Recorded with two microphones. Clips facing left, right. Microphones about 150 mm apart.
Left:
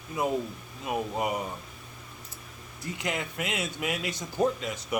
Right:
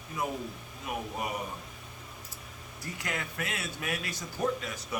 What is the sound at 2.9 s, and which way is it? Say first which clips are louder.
Speech: left 4 dB; 20° left (ahead or behind).